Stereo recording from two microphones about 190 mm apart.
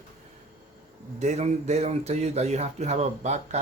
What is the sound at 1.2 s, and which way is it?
Speech, 35° right (ahead or behind).